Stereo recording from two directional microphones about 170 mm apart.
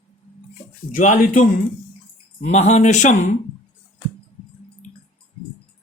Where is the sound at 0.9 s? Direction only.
50° left (ahead or behind).